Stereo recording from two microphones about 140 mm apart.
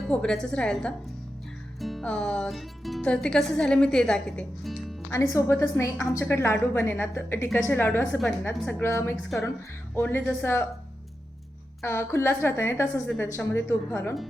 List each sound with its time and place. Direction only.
0.0 s speech: 5° left (ahead or behind)
5.1 s a woman's voice: 20° left (ahead or behind)
11.8 s a woman's voice: 20° left (ahead or behind)